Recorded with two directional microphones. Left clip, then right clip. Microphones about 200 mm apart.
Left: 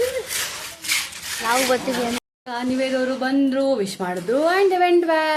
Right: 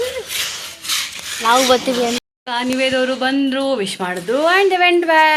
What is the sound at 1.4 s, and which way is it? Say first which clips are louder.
Speech: right 7 dB; 30° right (ahead or behind).